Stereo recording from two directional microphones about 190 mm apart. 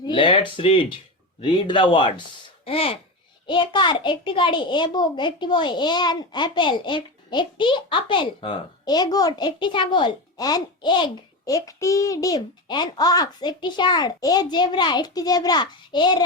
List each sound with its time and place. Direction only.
0.0 s a child's voice: 25° left (ahead or behind)